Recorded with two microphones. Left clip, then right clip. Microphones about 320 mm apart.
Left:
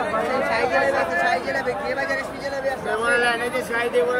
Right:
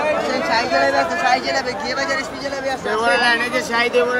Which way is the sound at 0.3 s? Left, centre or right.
Right.